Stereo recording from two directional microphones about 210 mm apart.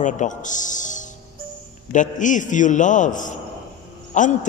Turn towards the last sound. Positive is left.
turn(degrees=35)  # may be behind; listen again after turning